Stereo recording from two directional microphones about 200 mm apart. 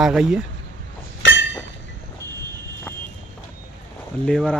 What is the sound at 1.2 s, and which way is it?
Chink, 65° left (ahead or behind).